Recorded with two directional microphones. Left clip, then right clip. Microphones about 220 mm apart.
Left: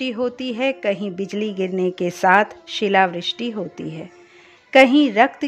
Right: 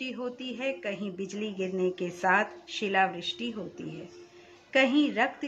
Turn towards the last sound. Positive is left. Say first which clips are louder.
# left 11 dB
turn(degrees=45)  # may be behind; listen again after turning